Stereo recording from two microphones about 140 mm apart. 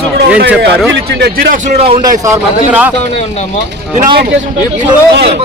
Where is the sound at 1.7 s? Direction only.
45° right (ahead or behind).